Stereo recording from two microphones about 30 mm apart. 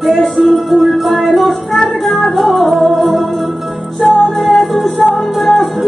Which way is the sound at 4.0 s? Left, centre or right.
Centre.